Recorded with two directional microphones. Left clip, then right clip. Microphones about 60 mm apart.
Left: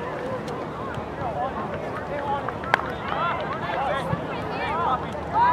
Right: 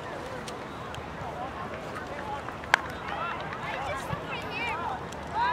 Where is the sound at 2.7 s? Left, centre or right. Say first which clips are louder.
Left 2 dB; centre.